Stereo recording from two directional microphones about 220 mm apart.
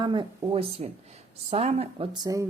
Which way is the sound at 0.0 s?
20° right (ahead or behind).